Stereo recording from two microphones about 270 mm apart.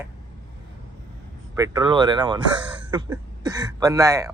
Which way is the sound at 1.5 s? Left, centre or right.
Centre.